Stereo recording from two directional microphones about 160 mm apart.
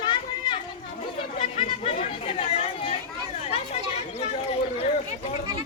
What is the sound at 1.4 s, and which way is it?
Chatter, 35° left (ahead or behind).